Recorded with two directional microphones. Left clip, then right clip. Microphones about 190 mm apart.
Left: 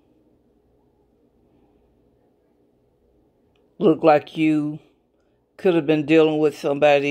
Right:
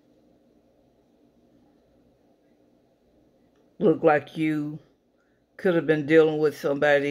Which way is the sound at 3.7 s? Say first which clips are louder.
Left 4 dB; 15° left (ahead or behind).